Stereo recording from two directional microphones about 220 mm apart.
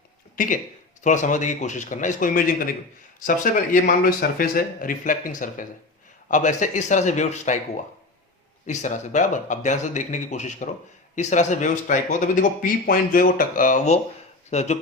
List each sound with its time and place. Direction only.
0.3 s speech: 35° left (ahead or behind)
8.6 s speech: 35° left (ahead or behind)